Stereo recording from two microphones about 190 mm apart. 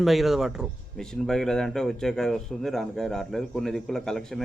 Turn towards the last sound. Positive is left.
turn(degrees=5)  # may be behind; listen again after turning